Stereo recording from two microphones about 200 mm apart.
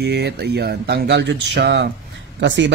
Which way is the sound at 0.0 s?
55° right (ahead or behind).